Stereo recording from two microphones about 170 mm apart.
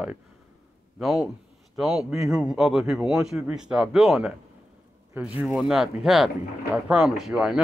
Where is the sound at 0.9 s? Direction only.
Centre (ahead or behind).